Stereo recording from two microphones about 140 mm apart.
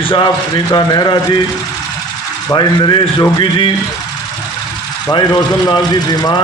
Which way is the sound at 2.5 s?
35° left (ahead or behind).